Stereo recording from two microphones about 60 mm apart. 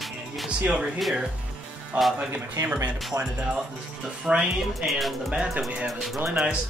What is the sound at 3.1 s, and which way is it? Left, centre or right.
Speech, right.